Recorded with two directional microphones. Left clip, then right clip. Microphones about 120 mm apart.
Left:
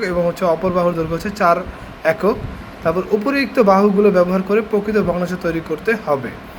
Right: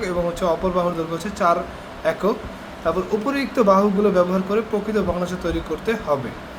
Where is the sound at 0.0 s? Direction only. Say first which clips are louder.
Left 5 dB; 25° left (ahead or behind).